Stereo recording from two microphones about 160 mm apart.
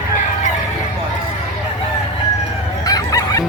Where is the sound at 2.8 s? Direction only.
20° left (ahead or behind).